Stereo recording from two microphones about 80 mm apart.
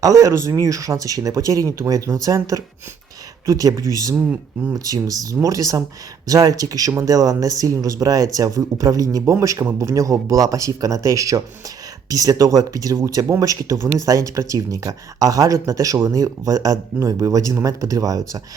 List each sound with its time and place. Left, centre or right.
0.0 s speech: right